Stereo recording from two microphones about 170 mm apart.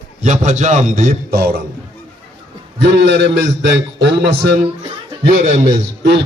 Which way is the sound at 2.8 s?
85° right.